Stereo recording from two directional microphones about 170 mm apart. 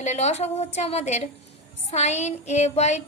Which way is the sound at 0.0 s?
40° left (ahead or behind).